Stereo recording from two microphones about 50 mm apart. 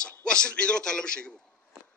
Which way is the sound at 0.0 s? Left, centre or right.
Centre.